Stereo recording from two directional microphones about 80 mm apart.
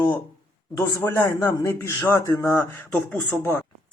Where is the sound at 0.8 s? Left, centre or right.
Left.